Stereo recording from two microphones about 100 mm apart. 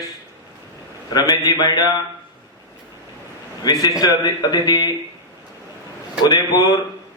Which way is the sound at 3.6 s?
40° left (ahead or behind).